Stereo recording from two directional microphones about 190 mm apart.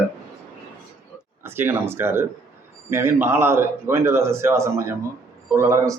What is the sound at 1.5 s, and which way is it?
A man's voice, 10° right (ahead or behind).